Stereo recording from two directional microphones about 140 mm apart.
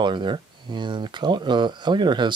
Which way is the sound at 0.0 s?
35° right (ahead or behind).